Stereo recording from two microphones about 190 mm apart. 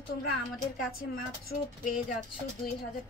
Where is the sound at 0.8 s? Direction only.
50° left (ahead or behind).